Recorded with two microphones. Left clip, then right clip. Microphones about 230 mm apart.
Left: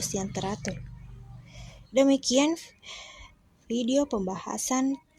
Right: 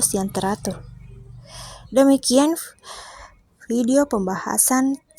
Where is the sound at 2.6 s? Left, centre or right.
Right.